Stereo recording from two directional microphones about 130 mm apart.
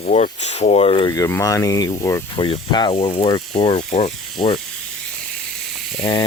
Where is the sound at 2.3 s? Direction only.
40° left (ahead or behind).